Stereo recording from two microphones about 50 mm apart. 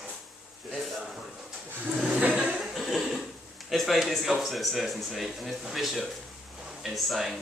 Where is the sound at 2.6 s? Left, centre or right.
Centre.